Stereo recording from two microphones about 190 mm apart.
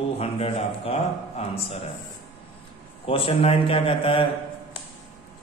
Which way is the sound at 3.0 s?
30° left (ahead or behind).